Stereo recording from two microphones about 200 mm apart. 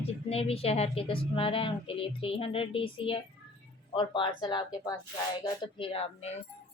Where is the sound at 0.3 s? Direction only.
30° left (ahead or behind).